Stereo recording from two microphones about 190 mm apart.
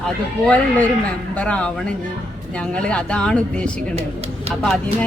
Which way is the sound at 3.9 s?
30° right (ahead or behind).